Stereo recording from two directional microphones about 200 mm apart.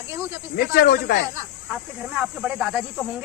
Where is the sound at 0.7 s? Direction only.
50° left (ahead or behind).